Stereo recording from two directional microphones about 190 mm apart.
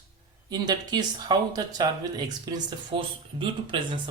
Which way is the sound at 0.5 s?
20° right (ahead or behind).